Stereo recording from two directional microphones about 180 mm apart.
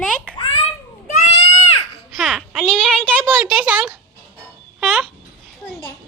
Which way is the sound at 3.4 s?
10° right (ahead or behind).